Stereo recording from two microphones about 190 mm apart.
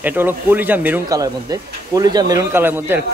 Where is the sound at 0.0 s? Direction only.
10° right (ahead or behind).